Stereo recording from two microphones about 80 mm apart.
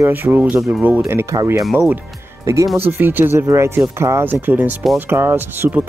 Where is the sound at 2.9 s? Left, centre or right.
Right.